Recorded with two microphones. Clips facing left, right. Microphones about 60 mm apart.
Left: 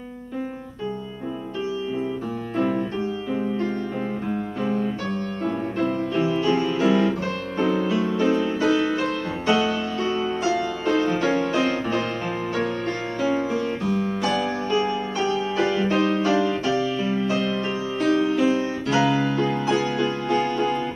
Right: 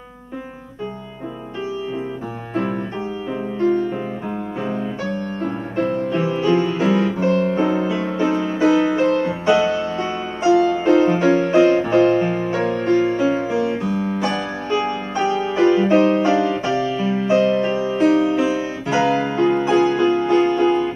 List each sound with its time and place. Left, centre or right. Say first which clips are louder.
5.4 s music: right 1 dB; right
18.4 s music: right 1 dB; centre
18.9 s music: right 3 dB; right